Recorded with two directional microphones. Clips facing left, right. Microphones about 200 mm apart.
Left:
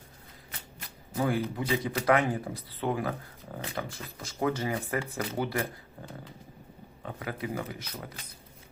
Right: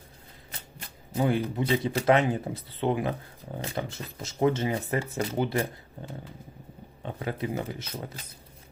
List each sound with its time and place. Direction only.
1.1 s speech: 20° right (ahead or behind)
7.0 s speech: 25° right (ahead or behind)